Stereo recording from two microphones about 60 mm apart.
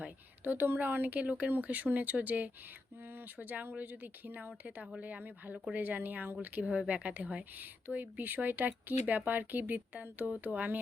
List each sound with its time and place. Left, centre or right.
0.0 s speech: right